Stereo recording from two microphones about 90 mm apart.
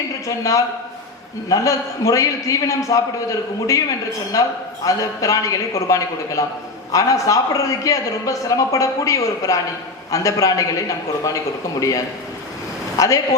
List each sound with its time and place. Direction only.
0.3 s a man's voice: 40° left (ahead or behind)